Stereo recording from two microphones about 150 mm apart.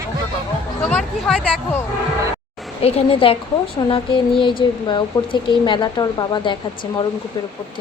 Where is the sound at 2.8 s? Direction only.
40° left (ahead or behind).